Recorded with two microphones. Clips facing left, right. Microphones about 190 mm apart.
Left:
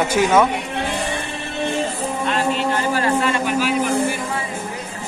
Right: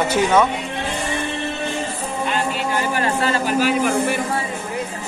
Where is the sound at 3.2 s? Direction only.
35° right (ahead or behind).